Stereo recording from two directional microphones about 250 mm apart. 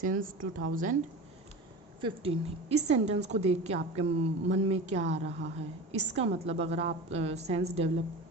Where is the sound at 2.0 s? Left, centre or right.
Right.